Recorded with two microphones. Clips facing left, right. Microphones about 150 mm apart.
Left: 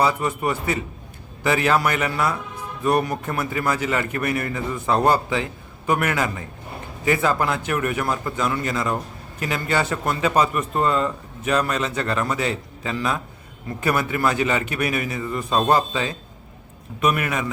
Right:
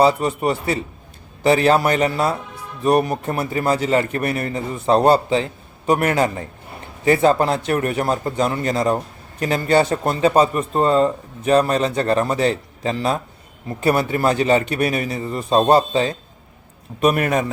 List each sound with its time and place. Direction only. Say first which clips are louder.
0.0 s a man's voice: right 5 dB; 30° right (ahead or behind)